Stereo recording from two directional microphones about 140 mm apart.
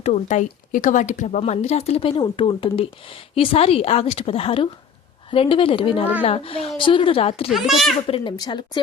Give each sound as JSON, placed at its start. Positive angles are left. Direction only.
{"t": 0.0, "sound": "a woman's voice", "side_deg": 55}
{"t": 7.5, "sound": "a child's voice", "side_deg": 0}
{"t": 8.0, "sound": "a woman's voice", "side_deg": 40}